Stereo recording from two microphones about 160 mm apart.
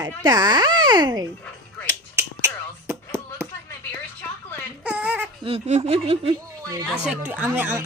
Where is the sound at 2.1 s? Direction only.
15° right (ahead or behind).